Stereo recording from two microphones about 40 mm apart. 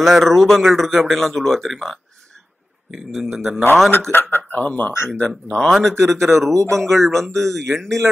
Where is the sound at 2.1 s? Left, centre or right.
Centre.